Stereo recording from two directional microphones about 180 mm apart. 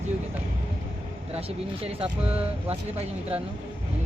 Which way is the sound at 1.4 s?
30° right (ahead or behind).